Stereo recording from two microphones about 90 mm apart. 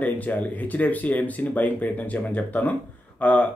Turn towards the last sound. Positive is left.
turn(degrees=15)  # may be behind; listen again after turning